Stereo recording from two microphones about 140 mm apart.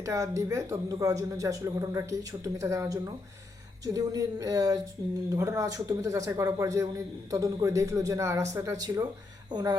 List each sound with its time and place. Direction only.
0.0 s speech: 20° right (ahead or behind)